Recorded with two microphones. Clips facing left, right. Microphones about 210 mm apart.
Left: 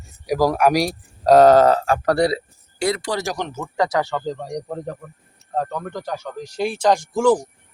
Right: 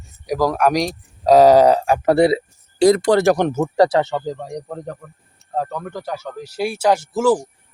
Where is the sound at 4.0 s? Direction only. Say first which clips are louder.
Right 3 dB; 20° right (ahead or behind).